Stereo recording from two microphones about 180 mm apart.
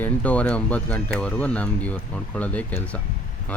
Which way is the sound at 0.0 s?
10° left (ahead or behind).